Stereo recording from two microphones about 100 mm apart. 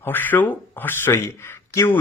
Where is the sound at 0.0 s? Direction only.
20° left (ahead or behind).